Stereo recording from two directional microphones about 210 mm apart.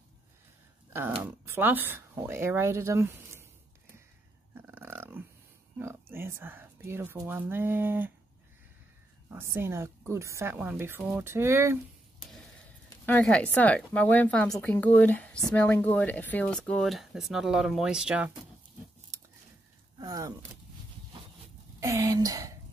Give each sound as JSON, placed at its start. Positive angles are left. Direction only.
{"t": 0.9, "sound": "speech", "side_deg": -10}
{"t": 4.6, "sound": "dog", "side_deg": -10}
{"t": 5.8, "sound": "speech", "side_deg": -10}
{"t": 9.3, "sound": "speech", "side_deg": -10}
{"t": 13.0, "sound": "speech", "side_deg": 5}
{"t": 20.0, "sound": "speech", "side_deg": -15}
{"t": 21.7, "sound": "speech", "side_deg": -15}